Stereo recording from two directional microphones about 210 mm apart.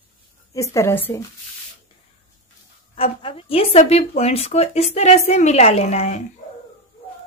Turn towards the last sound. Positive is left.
turn(degrees=35)  # may be behind; listen again after turning